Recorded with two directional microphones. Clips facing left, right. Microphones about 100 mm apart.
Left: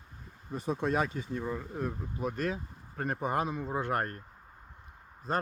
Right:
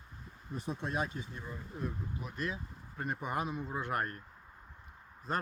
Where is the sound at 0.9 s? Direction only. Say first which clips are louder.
Left 7 dB; 90° left; by 3.2 s 50° left (ahead or behind).